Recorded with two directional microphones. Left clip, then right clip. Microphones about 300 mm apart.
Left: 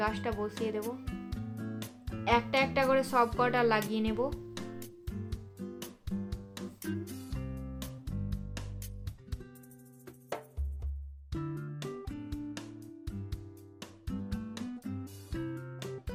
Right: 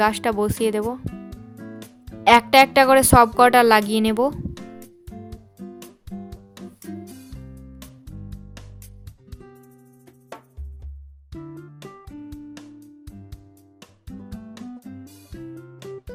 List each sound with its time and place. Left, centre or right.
0.0 s speech: right
1.0 s music: centre
2.2 s speech: right
5.0 s music: centre
11.3 s music: centre